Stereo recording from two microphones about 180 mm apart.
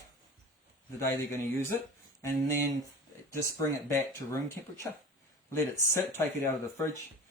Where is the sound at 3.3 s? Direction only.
15° left (ahead or behind).